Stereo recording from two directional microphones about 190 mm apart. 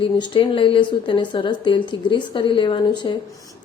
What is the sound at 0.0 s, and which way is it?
A woman's voice, 25° left (ahead or behind).